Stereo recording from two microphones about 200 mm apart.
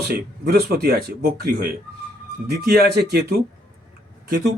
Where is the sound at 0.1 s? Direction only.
50° right (ahead or behind).